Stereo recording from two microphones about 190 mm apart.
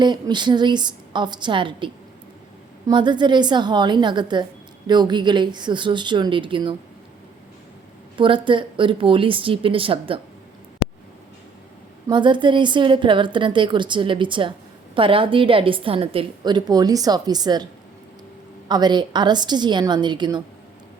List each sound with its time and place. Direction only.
0.0 s a woman's voice: 25° right (ahead or behind)
8.1 s a woman's voice: 25° right (ahead or behind)
12.0 s a woman's voice: 25° right (ahead or behind)
18.7 s a woman's voice: 20° right (ahead or behind)